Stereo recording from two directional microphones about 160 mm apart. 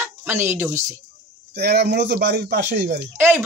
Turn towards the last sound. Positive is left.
turn(degrees=-15)  # may be behind; listen again after turning